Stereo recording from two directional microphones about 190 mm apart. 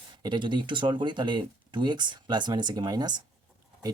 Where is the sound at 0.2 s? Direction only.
25° right (ahead or behind).